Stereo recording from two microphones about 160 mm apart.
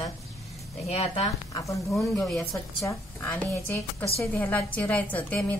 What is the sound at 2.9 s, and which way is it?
A woman's voice, 15° left (ahead or behind).